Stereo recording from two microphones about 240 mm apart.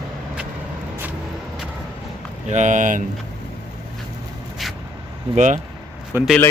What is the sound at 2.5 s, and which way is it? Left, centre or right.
Speech, right.